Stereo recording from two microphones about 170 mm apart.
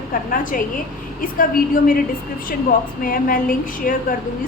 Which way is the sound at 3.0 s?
55° left (ahead or behind).